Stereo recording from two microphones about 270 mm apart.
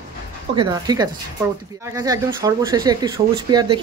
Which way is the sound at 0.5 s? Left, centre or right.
Centre.